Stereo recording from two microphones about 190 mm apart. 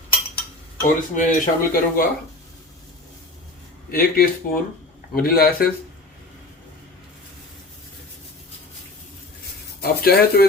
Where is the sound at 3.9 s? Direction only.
50° left (ahead or behind).